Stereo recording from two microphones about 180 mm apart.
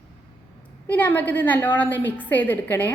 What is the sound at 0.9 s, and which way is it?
A woman's voice, 10° left (ahead or behind).